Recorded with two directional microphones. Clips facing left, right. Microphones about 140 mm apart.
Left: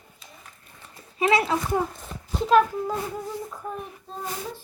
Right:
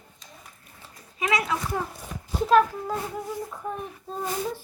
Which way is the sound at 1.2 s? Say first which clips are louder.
Left 4 dB; 30° left (ahead or behind).